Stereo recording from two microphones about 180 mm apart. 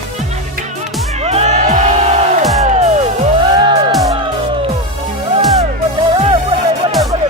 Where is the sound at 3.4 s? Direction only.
25° right (ahead or behind).